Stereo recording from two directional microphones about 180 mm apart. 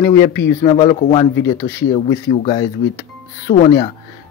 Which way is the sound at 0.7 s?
30° left (ahead or behind).